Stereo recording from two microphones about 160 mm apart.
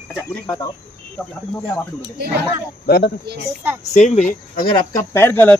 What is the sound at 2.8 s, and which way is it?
Speech, 85° left.